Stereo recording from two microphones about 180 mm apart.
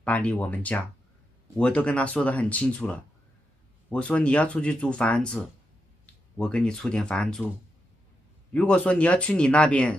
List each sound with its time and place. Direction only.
0.0 s speech: 10° left (ahead or behind)
8.5 s speech: 5° left (ahead or behind)